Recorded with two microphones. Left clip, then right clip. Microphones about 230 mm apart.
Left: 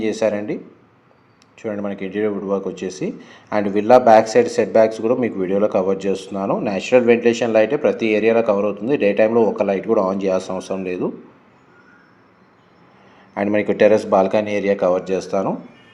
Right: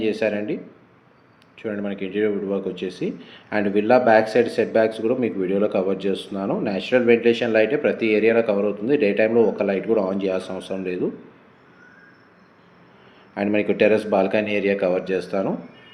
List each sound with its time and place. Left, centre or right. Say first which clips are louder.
0.0 s speech: left 3 dB; left
13.3 s speech: left 3 dB; left